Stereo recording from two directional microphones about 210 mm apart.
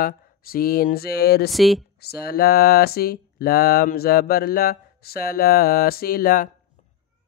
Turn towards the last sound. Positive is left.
turn(degrees=45)  # may be behind; listen again after turning